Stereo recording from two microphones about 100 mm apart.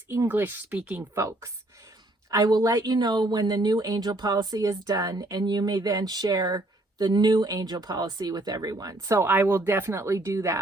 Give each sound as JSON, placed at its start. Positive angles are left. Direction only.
{"t": 0.1, "sound": "speech", "side_deg": -25}
{"t": 1.1, "sound": "speech", "side_deg": -30}
{"t": 2.3, "sound": "speech", "side_deg": -40}
{"t": 9.2, "sound": "speech", "side_deg": -20}